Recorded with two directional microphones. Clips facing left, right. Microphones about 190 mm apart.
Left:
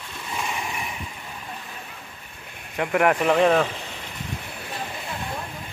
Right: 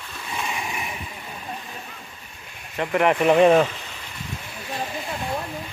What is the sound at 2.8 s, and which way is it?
Speech, 5° left (ahead or behind).